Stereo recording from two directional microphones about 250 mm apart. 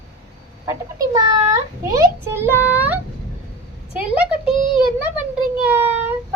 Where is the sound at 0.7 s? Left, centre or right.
Centre.